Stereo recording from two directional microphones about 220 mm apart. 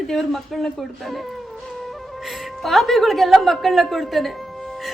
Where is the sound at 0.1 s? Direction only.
Centre (ahead or behind).